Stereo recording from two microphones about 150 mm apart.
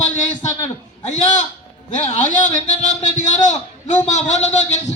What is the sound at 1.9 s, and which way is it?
A man's voice, 55° left (ahead or behind).